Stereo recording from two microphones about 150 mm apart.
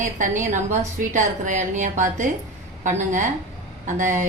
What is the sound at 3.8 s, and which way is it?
Speech, 55° right (ahead or behind).